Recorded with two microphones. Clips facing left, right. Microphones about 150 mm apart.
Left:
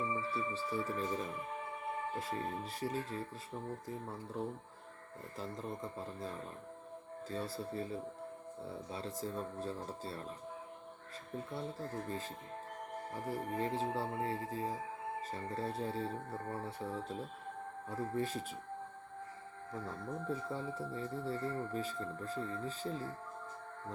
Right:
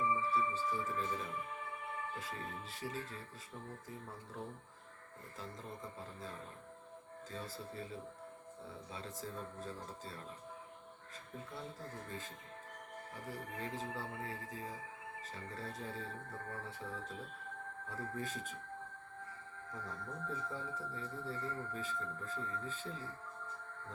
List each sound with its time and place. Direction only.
0.1 s music: 35° left (ahead or behind)
2.1 s speech: 35° left (ahead or behind)
7.3 s speech: 35° left (ahead or behind)
8.9 s speech: 35° left (ahead or behind)
12.0 s speech: 35° left (ahead or behind)
19.7 s speech: 30° left (ahead or behind)